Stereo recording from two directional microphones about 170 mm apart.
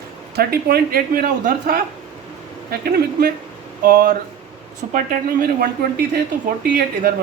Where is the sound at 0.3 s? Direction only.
65° right (ahead or behind).